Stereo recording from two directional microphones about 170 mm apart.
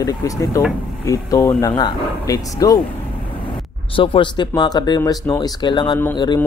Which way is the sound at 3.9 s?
30° left (ahead or behind).